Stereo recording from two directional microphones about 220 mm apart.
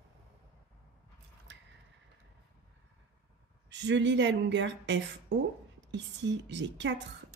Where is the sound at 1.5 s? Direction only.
55° right (ahead or behind).